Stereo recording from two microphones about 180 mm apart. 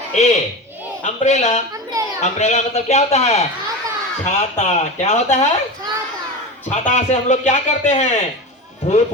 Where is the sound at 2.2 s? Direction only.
40° left (ahead or behind).